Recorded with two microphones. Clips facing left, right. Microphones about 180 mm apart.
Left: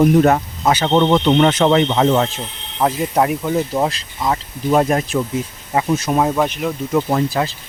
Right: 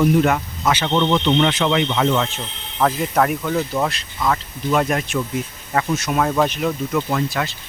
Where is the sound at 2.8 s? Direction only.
20° left (ahead or behind).